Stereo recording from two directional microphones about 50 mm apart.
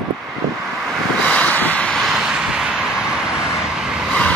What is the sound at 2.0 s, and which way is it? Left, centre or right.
Vehicle, centre.